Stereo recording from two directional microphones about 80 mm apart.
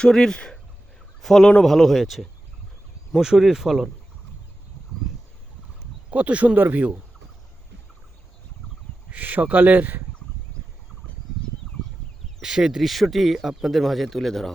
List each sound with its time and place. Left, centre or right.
0.0 s speech: centre
6.1 s speech: centre
9.0 s speech: centre
12.4 s speech: centre